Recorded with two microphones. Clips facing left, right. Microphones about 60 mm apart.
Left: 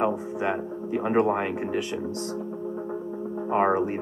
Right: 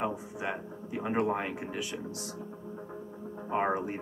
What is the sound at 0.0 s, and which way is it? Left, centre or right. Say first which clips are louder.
Speech: left 8 dB; left.